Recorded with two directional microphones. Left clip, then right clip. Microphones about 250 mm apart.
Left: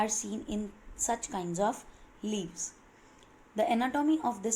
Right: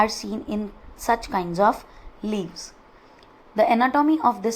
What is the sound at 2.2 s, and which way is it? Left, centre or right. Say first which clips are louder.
Speech: right 7 dB; right.